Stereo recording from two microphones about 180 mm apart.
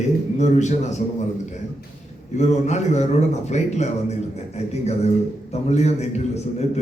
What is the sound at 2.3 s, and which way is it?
A man's voice, 40° left (ahead or behind).